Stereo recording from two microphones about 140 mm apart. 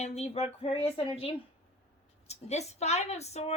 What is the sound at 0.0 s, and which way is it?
A woman's voice, 50° left (ahead or behind).